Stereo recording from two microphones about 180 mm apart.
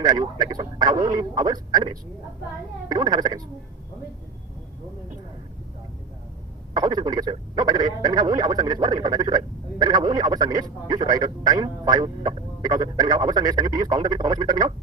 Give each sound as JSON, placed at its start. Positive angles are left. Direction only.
{"t": 0.0, "sound": "speech", "side_deg": -25}
{"t": 6.7, "sound": "speech", "side_deg": -25}